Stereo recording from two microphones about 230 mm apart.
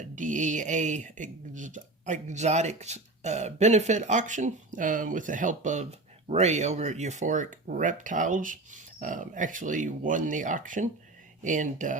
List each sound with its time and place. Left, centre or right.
0.0 s speech: right